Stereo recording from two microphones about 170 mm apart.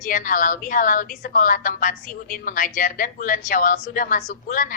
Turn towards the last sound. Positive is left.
turn(degrees=50)  # may be behind; listen again after turning